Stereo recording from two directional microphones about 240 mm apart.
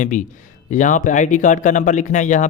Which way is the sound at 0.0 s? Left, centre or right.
Left.